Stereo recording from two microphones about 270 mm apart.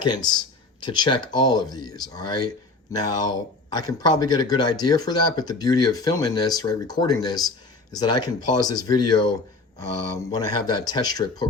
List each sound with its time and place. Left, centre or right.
0.0 s speech: centre
10.3 s speech: centre